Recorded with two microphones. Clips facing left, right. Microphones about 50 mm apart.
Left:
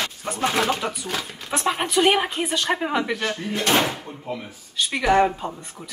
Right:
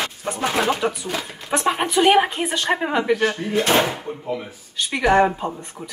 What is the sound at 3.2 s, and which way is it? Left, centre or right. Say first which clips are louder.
Speech: right 5 dB; right.